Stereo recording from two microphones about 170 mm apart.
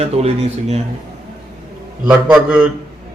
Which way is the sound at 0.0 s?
35° right (ahead or behind).